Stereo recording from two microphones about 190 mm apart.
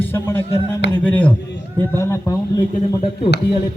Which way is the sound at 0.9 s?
10° left (ahead or behind).